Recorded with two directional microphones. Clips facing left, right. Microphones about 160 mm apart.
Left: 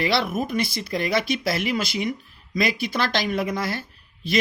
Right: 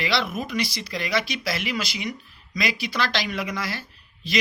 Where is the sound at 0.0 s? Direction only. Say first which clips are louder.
Left 3 dB; 50° left (ahead or behind).